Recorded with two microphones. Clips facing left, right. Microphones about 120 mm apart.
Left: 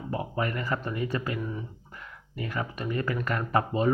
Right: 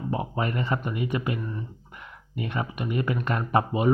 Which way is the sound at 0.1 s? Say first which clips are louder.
Right 1 dB; 20° right (ahead or behind).